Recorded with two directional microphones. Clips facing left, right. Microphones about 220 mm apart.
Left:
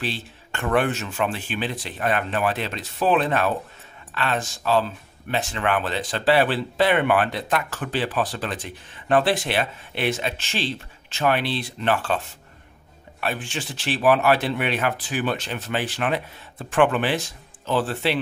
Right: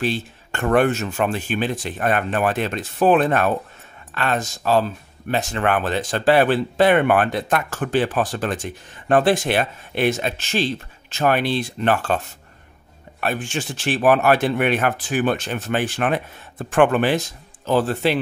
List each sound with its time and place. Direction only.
0.0 s speech: 45° right (ahead or behind)
13.2 s speech: 45° right (ahead or behind)